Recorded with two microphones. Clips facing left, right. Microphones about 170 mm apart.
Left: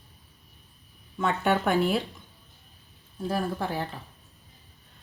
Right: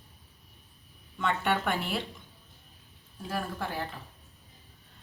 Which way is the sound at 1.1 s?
40° left (ahead or behind).